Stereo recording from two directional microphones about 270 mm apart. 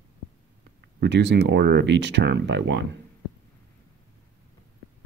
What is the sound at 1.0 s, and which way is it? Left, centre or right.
Speech, right.